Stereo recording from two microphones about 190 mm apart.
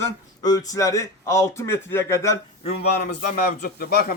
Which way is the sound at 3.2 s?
55° left (ahead or behind).